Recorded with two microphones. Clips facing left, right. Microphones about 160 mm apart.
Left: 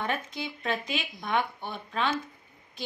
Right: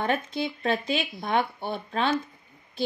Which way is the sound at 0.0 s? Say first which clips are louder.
Right 5 dB; 30° right (ahead or behind).